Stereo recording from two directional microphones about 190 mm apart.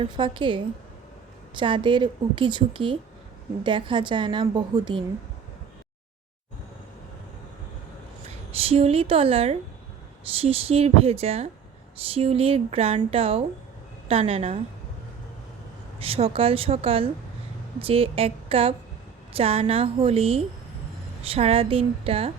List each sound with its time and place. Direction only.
0.0 s a woman's voice: 25° right (ahead or behind)
8.5 s a woman's voice: 30° right (ahead or behind)
16.0 s a woman's voice: 30° right (ahead or behind)